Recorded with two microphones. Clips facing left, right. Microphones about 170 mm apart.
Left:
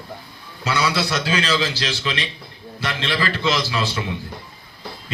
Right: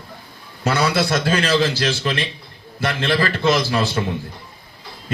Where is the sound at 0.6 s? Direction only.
50° right (ahead or behind).